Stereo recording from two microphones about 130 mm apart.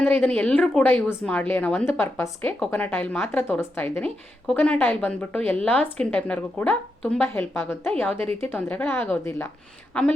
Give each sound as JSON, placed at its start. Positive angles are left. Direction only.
{"t": 0.2, "sound": "a woman's voice", "side_deg": 10}
{"t": 9.9, "sound": "a woman's voice", "side_deg": 5}